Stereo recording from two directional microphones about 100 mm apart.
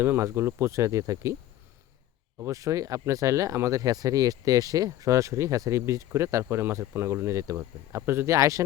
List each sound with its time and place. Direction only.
0.0 s speech: 25° right (ahead or behind)
2.4 s speech: 30° right (ahead or behind)